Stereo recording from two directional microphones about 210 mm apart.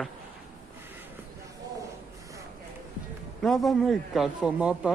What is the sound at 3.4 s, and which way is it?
A woman's voice, centre (ahead or behind).